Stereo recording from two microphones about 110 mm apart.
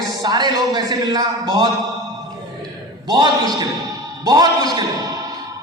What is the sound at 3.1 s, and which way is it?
A man's voice, 40° right (ahead or behind).